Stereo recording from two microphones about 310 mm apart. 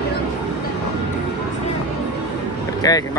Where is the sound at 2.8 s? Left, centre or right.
Centre.